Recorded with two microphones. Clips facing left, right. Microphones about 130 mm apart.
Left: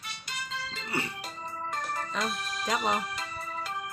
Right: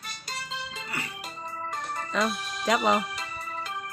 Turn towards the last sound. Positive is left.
turn(degrees=5)  # may be behind; listen again after turning